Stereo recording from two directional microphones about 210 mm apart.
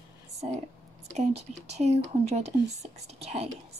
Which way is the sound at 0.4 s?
35° right (ahead or behind).